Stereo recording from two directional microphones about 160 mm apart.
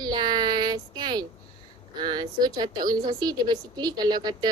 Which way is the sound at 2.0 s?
25° right (ahead or behind).